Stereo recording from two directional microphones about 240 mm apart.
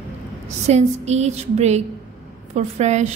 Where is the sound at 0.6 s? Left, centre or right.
Right.